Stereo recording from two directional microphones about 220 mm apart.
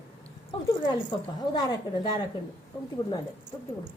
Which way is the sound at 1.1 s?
20° left (ahead or behind).